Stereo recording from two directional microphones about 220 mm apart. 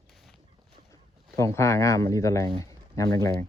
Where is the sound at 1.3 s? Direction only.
15° left (ahead or behind).